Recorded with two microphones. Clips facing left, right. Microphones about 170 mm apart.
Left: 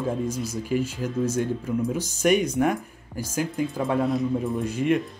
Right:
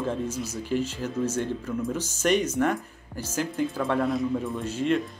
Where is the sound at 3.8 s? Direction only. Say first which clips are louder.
Left 2 dB; 15° left (ahead or behind).